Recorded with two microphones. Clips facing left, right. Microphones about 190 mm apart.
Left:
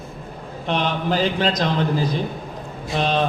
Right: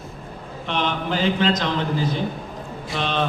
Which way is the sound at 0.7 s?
35° left (ahead or behind).